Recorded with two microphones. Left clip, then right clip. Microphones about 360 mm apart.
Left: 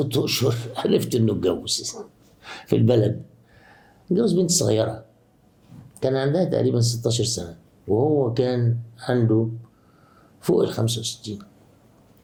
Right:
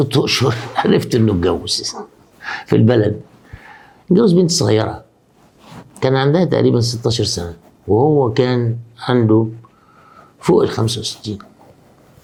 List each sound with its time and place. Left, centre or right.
0.0 s speech: right
4.1 s speech: right
10.4 s speech: right